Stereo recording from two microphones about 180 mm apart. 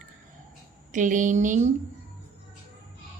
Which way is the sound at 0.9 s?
45° right (ahead or behind).